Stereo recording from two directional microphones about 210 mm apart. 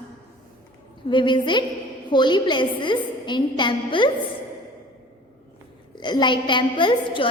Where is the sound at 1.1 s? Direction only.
20° left (ahead or behind).